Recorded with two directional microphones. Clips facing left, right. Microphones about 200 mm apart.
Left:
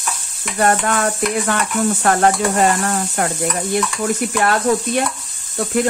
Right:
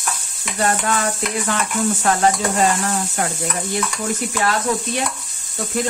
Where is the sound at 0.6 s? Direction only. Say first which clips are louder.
Left 3 dB; 55° left (ahead or behind).